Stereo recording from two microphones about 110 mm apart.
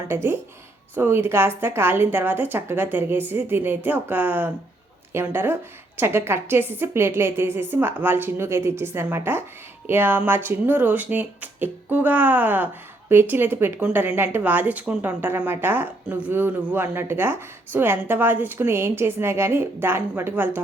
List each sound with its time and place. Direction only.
0.1 s a woman's voice: 20° right (ahead or behind)